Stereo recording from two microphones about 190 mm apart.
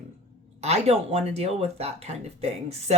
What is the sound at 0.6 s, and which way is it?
Speech, 35° right (ahead or behind).